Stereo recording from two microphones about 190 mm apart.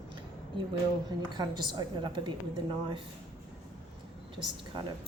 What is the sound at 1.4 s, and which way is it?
Speech, 25° right (ahead or behind).